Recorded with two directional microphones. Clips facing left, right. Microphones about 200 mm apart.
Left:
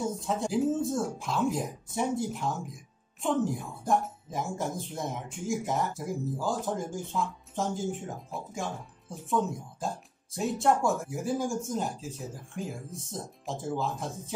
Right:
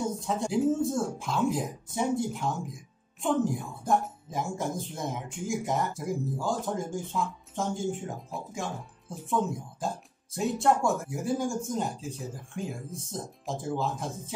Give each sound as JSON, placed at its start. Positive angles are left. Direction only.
{"t": 0.0, "sound": "speech", "side_deg": 0}